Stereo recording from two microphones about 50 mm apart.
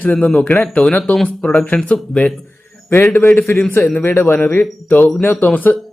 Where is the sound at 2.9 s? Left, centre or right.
Left.